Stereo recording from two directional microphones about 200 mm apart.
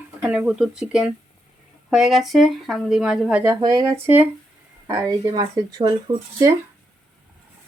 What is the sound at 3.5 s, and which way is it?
Speech, 20° right (ahead or behind).